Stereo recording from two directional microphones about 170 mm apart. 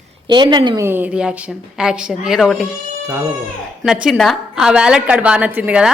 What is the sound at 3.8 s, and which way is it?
A woman's voice, 5° right (ahead or behind).